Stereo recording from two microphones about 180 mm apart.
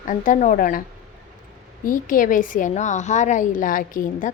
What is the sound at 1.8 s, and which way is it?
A woman's voice, 50° left (ahead or behind).